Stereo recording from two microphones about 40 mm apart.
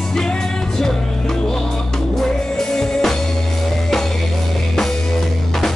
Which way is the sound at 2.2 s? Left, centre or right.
Centre.